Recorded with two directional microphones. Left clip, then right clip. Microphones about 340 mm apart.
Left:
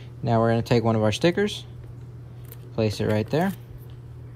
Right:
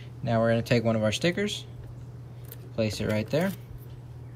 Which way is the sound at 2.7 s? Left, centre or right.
Centre.